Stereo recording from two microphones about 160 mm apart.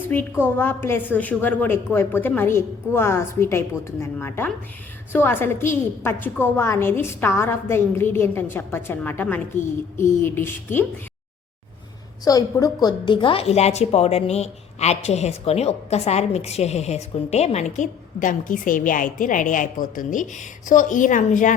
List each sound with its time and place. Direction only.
0.1 s a woman's voice: 15° left (ahead or behind)
12.2 s speech: 20° left (ahead or behind); by 21.5 s 50° left (ahead or behind)